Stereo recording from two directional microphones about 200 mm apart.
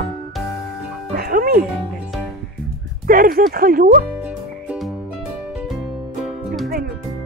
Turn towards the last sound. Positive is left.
turn(degrees=0)  # may be behind; listen again after turning